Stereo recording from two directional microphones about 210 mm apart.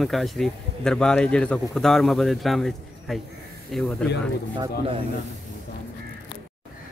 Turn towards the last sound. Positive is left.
turn(degrees=-25)  # may be behind; listen again after turning